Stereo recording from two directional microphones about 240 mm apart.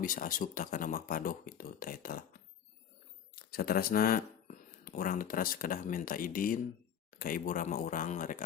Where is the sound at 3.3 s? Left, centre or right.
Left.